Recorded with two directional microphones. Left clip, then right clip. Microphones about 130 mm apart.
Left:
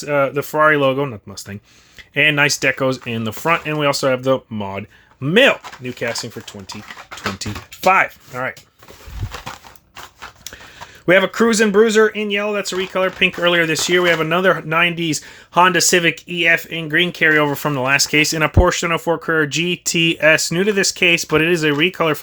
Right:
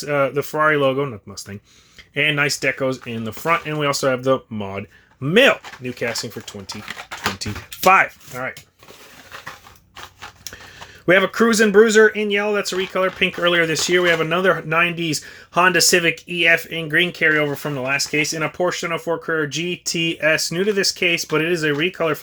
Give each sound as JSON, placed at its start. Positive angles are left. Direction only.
{"t": 0.0, "sound": "speech", "side_deg": 5}
{"t": 7.4, "sound": "speech", "side_deg": 20}
{"t": 10.2, "sound": "speech", "side_deg": 10}